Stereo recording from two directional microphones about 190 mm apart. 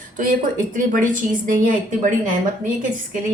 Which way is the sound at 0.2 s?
45° right (ahead or behind).